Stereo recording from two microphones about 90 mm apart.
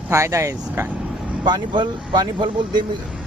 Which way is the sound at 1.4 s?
55° right (ahead or behind).